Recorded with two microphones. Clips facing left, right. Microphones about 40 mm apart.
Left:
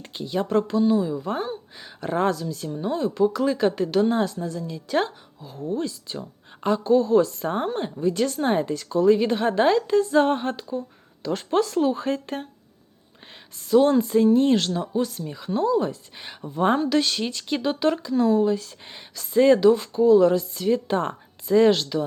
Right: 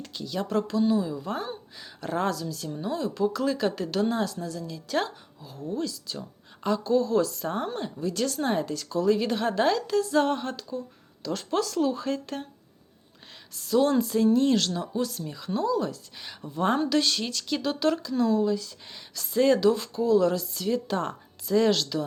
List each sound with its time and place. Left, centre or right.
0.0 s a sound: left
0.3 s speech: centre
5.7 s speech: left
8.0 s speech: centre
13.6 s speech: centre
15.6 s speech: left
16.6 s speech: centre
18.3 s speech: left
19.1 s speech: centre